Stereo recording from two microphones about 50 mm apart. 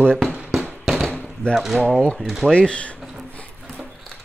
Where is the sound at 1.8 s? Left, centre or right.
Centre.